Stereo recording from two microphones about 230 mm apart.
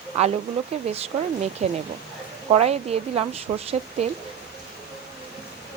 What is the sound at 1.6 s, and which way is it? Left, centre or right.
Speech, right.